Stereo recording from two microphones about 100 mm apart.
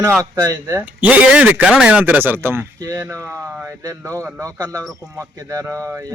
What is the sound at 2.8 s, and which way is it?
A man's voice, 35° right (ahead or behind).